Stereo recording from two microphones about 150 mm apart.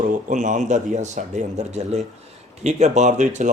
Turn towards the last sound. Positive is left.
turn(degrees=-55)  # may be behind; listen again after turning